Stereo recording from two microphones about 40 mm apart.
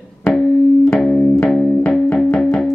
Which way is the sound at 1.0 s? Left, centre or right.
Left.